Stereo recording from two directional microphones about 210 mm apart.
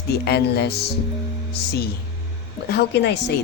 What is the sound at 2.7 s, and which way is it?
Speech, 55° left (ahead or behind).